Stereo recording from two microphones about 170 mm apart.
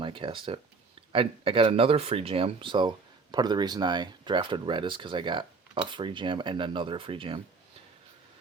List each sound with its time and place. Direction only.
0.0 s speech: 30° right (ahead or behind)